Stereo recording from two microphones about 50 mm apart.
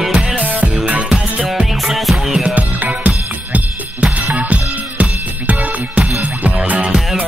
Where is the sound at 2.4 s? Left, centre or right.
Right.